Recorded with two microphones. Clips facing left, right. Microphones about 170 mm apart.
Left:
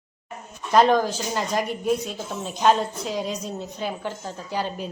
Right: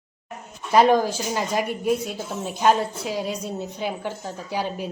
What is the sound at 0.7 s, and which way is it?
A woman's voice, 10° right (ahead or behind).